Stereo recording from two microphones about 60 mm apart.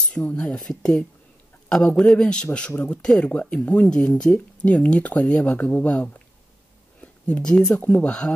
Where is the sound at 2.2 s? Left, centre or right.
Centre.